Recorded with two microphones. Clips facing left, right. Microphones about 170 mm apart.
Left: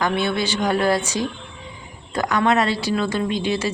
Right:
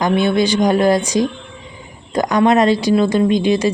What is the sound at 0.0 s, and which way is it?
A woman's voice, 15° right (ahead or behind).